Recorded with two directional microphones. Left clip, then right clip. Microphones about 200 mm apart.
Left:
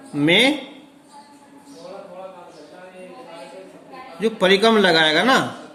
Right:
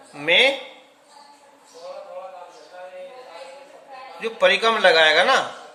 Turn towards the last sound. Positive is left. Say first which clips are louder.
# even
turn(degrees=20)  # may be behind; listen again after turning